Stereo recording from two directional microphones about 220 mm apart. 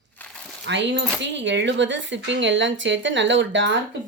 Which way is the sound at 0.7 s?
55° right (ahead or behind).